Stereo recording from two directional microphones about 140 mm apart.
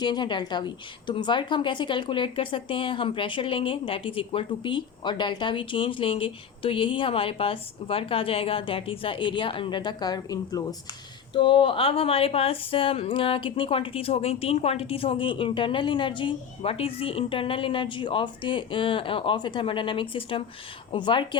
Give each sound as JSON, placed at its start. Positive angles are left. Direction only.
{"t": 0.0, "sound": "speech", "side_deg": 30}
{"t": 11.3, "sound": "speech", "side_deg": 35}